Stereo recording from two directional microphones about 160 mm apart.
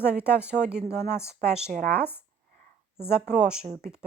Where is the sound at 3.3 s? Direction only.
5° right (ahead or behind).